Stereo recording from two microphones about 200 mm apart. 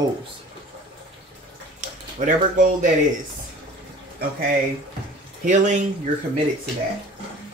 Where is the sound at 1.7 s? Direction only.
40° right (ahead or behind).